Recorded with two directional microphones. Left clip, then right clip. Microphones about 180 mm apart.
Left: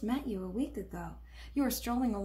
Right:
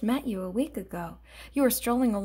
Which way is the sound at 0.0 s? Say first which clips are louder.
Right 6 dB; 50° right (ahead or behind).